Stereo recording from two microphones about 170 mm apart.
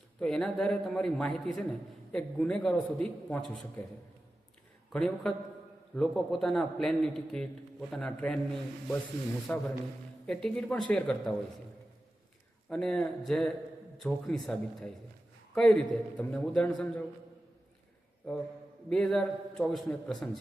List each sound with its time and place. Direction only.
0.2 s a man's voice: 5° left (ahead or behind)
4.9 s a man's voice: 5° left (ahead or behind)
9.5 s a man's voice: 5° left (ahead or behind)
12.6 s a man's voice: 5° left (ahead or behind)
18.3 s a man's voice: 5° left (ahead or behind)